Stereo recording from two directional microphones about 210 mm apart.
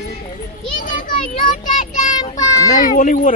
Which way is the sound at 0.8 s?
40° left (ahead or behind).